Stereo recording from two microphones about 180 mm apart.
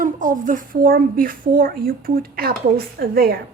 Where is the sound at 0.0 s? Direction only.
45° right (ahead or behind).